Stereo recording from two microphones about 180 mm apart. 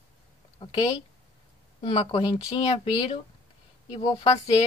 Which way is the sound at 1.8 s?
35° left (ahead or behind).